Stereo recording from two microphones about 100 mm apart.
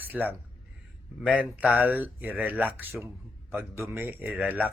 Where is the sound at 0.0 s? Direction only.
20° right (ahead or behind).